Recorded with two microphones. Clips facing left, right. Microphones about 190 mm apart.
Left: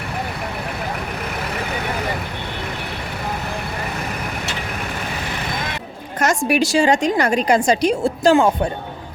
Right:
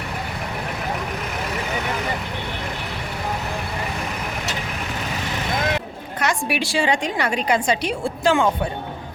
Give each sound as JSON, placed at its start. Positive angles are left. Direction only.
{"t": 6.1, "sound": "a woman's voice", "side_deg": 45}